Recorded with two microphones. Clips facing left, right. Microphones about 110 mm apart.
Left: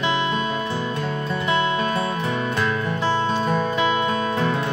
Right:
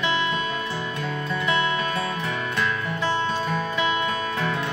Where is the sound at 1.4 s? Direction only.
30° left (ahead or behind).